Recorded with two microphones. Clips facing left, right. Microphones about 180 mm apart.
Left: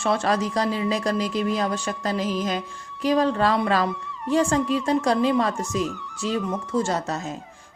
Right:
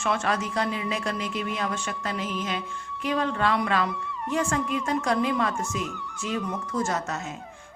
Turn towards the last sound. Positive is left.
turn(degrees=30)  # may be behind; listen again after turning